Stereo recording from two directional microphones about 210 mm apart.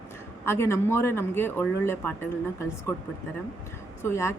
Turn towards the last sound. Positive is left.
turn(degrees=10)  # may be behind; listen again after turning